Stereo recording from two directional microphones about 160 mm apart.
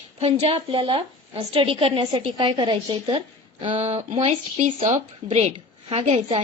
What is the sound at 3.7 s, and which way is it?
A woman's voice, 40° right (ahead or behind).